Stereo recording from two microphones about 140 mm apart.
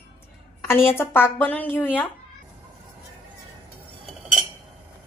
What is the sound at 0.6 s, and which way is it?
A woman's voice, 15° left (ahead or behind).